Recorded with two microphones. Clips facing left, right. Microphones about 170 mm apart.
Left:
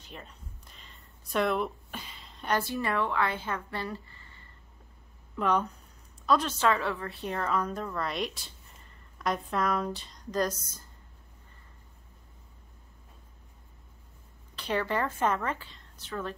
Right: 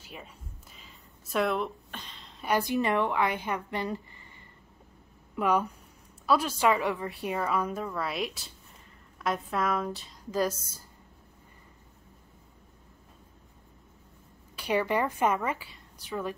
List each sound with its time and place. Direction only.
0.0 s a sound: 5° right (ahead or behind)
2.4 s a woman's voice: 15° right (ahead or behind)
14.5 s a woman's voice: 10° right (ahead or behind)